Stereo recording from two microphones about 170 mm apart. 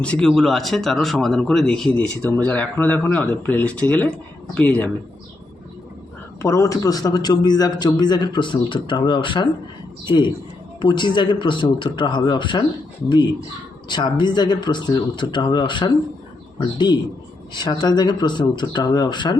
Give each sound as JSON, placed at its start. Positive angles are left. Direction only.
{"t": 0.0, "sound": "speech", "side_deg": 5}
{"t": 6.4, "sound": "a man's voice", "side_deg": 20}
{"t": 13.8, "sound": "a man's voice", "side_deg": 25}
{"t": 17.5, "sound": "a man's voice", "side_deg": 25}